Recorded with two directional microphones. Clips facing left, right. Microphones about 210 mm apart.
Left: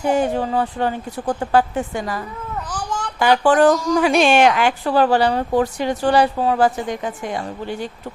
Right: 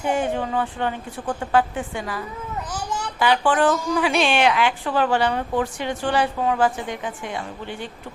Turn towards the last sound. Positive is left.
turn(degrees=40)  # may be behind; listen again after turning